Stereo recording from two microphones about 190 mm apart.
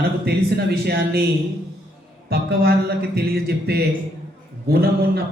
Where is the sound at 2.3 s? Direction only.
55° right (ahead or behind).